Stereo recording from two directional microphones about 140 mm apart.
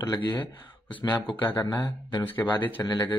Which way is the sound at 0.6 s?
10° left (ahead or behind).